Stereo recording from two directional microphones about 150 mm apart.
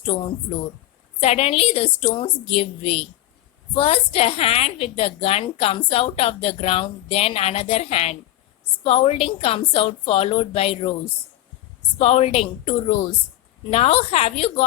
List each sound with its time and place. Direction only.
0.0 s a woman's voice: 40° left (ahead or behind)
11.9 s a woman's voice: 45° left (ahead or behind)